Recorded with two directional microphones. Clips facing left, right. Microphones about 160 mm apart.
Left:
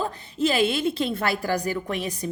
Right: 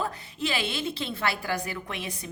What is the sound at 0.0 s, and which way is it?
A woman's voice, 40° left (ahead or behind).